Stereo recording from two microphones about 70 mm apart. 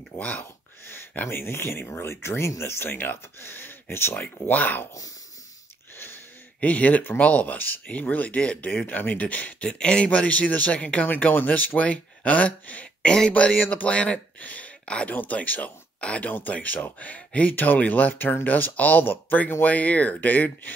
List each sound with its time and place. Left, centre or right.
0.4 s speech: left
6.6 s speech: left